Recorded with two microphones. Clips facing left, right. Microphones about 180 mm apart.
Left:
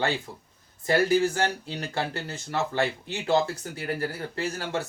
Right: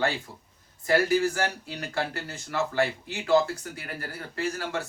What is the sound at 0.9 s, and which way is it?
Speech, 20° left (ahead or behind).